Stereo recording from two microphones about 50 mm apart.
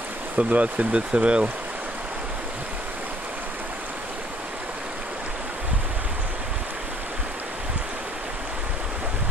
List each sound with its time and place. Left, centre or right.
0.4 s speech: right